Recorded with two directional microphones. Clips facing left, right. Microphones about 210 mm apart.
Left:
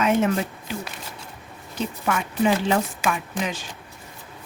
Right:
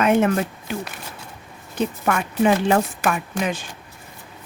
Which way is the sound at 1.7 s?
55° right (ahead or behind).